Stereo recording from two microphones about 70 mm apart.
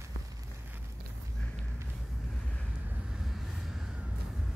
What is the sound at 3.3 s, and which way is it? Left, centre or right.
Vehicle, centre.